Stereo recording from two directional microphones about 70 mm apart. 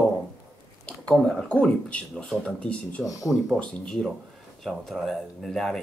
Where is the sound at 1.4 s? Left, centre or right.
Centre.